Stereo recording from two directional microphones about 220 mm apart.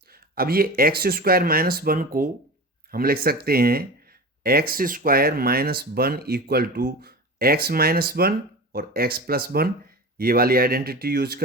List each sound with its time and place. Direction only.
0.1 s speech: 45° right (ahead or behind)